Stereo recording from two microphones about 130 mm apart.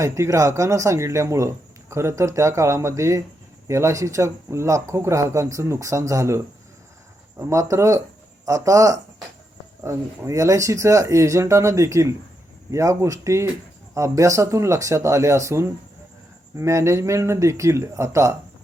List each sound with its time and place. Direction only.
0.0 s speech: 25° right (ahead or behind)